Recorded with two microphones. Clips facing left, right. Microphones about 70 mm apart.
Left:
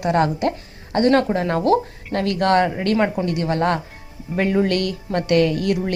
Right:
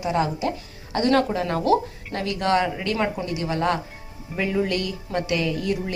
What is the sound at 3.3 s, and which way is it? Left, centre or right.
Speech, left.